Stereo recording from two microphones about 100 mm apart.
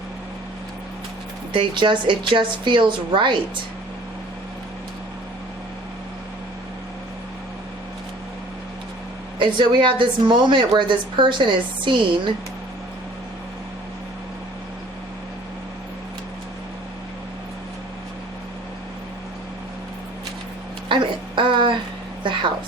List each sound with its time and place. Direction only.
1.5 s speech: 50° right (ahead or behind)
9.4 s speech: 55° right (ahead or behind)
20.9 s a sound: 55° right (ahead or behind)